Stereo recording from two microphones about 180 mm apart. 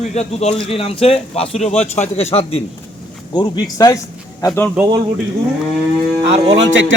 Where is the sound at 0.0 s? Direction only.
35° left (ahead or behind).